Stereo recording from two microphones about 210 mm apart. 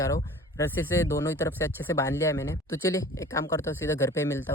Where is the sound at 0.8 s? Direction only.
10° left (ahead or behind).